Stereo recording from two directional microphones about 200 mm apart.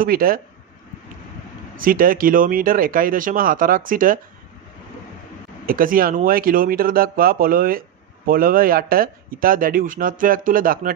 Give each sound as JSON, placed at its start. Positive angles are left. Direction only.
{"t": 0.0, "sound": "speech", "side_deg": -45}
{"t": 1.8, "sound": "speech", "side_deg": -45}
{"t": 5.7, "sound": "speech", "side_deg": -45}